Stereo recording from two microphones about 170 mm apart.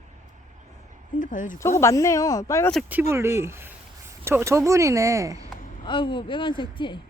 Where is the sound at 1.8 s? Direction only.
20° left (ahead or behind).